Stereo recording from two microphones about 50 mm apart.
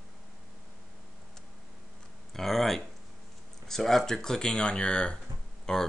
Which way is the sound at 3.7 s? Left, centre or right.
Centre.